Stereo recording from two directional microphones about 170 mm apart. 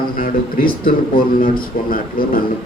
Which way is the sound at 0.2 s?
60° left (ahead or behind).